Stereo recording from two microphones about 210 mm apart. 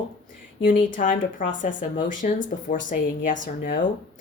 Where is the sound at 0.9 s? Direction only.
40° left (ahead or behind).